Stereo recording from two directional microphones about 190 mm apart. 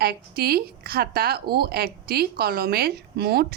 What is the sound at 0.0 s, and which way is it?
A woman's voice, 55° right (ahead or behind).